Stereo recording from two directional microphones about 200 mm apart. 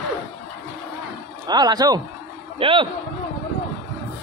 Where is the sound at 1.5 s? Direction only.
20° right (ahead or behind).